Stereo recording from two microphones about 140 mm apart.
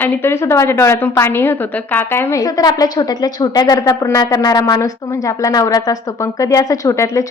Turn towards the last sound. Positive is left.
turn(degrees=25)  # may be behind; listen again after turning